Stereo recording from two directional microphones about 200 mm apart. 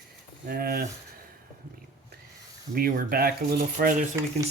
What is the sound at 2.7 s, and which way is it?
Speech, 45° right (ahead or behind).